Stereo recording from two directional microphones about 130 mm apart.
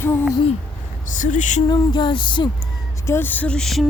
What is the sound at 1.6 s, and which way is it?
Music, 35° left (ahead or behind).